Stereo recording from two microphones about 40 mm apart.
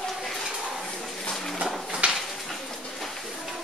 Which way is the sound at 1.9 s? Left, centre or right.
Right.